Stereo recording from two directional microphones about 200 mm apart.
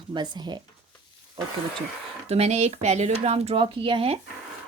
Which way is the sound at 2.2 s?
30° right (ahead or behind).